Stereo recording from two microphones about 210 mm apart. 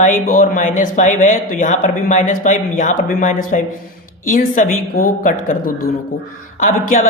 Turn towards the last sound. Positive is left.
turn(degrees=40)  # may be behind; listen again after turning